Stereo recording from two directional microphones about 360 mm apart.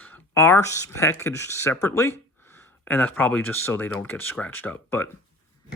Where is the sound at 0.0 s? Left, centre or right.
Centre.